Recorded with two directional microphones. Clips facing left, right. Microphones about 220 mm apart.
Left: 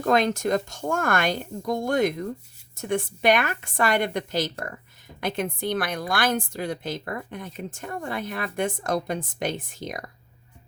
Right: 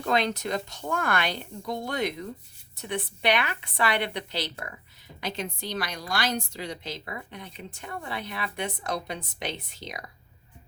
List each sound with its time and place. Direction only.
0.0 s a woman's voice: 45° left (ahead or behind)